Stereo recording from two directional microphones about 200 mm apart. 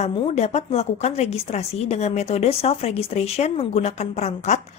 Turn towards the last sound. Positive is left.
turn(degrees=35)  # may be behind; listen again after turning